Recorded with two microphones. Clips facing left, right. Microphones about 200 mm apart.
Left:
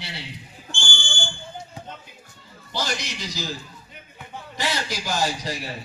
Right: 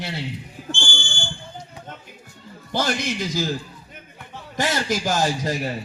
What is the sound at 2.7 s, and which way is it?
Speech, 50° right (ahead or behind).